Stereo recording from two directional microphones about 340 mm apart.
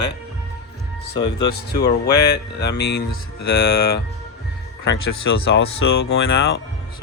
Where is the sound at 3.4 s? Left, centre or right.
Left.